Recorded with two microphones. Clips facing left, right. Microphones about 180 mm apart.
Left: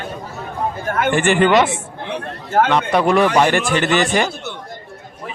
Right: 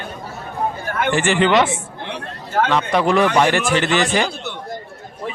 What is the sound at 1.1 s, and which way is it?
Speech, 50° left (ahead or behind).